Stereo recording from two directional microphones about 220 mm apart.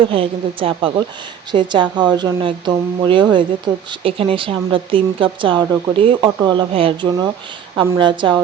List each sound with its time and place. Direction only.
0.0 s speech: 25° right (ahead or behind)